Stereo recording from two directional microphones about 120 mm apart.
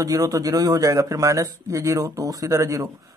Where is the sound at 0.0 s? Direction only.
30° right (ahead or behind).